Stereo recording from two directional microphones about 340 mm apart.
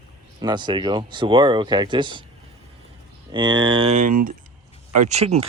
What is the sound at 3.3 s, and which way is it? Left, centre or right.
Speech, centre.